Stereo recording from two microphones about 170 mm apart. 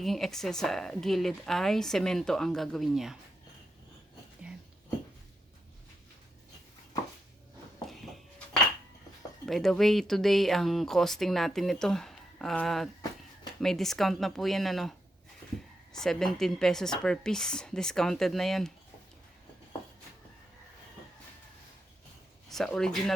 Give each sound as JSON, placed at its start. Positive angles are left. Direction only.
{"t": 0.0, "sound": "speech", "side_deg": 0}
{"t": 9.5, "sound": "speech", "side_deg": 0}
{"t": 22.4, "sound": "speech", "side_deg": 0}